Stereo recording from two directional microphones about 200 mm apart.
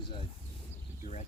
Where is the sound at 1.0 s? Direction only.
35° left (ahead or behind).